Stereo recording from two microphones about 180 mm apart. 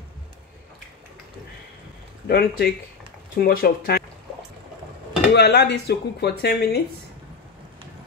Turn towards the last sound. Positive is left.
turn(degrees=65)  # may be behind; listen again after turning